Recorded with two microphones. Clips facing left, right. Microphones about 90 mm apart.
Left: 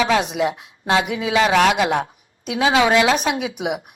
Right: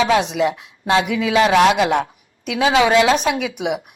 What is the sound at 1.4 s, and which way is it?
Speech, 15° right (ahead or behind).